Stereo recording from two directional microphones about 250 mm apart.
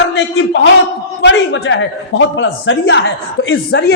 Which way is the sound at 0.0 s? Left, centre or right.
Left.